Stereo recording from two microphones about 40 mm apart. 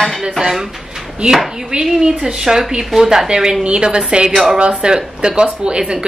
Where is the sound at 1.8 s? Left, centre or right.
Right.